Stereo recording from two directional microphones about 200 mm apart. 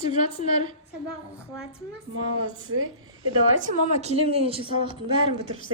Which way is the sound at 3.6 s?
35° right (ahead or behind).